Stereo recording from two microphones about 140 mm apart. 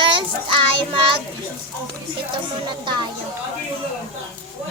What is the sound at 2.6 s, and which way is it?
Speech, 35° right (ahead or behind).